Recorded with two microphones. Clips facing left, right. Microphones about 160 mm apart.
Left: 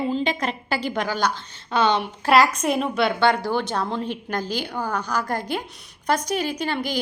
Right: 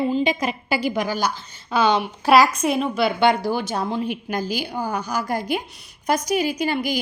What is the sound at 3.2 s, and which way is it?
A woman's voice, 15° right (ahead or behind).